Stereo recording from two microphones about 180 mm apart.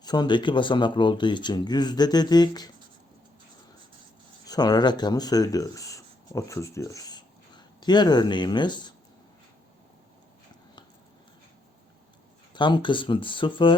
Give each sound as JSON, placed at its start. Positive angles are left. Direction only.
{"t": 0.0, "sound": "speech", "side_deg": 25}
{"t": 4.4, "sound": "speech", "side_deg": 20}
{"t": 12.5, "sound": "speech", "side_deg": 25}